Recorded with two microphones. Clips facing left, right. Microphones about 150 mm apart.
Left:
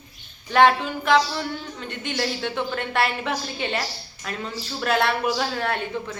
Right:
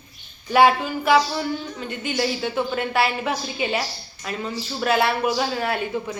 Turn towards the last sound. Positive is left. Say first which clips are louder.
# right 2 dB
turn(degrees=-10)  # may be behind; listen again after turning